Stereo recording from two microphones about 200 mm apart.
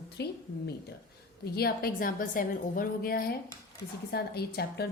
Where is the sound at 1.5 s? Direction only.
50° left (ahead or behind).